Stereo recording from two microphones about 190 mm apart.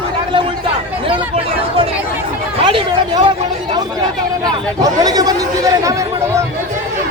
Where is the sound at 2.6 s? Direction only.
25° right (ahead or behind).